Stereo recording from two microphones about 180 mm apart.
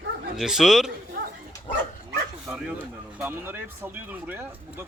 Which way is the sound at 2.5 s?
5° right (ahead or behind).